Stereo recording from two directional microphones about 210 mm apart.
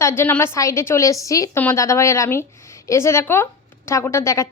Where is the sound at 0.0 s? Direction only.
10° left (ahead or behind).